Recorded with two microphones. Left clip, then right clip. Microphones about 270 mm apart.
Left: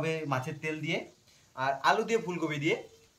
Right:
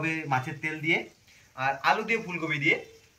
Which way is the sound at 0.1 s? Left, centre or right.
Centre.